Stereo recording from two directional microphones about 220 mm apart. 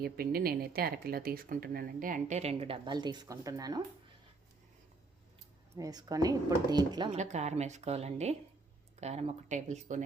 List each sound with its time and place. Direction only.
0.0 s speech: 45° right (ahead or behind); by 3.8 s 15° right (ahead or behind)
5.7 s speech: 15° right (ahead or behind)
7.1 s a woman's voice: 30° right (ahead or behind)